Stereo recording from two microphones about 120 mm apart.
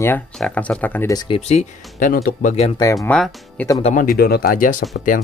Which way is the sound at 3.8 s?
65° left (ahead or behind).